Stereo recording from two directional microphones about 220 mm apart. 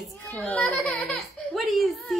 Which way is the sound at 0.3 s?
5° left (ahead or behind).